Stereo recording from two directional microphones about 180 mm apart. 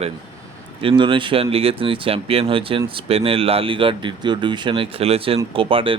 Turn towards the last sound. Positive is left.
turn(degrees=-30)  # may be behind; listen again after turning